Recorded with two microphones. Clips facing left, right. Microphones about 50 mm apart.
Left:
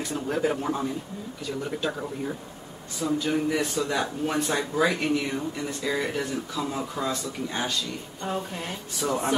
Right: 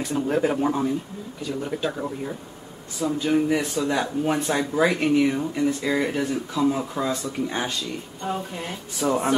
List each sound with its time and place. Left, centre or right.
0.1 s speech: centre
3.8 s speech: centre
8.2 s speech: centre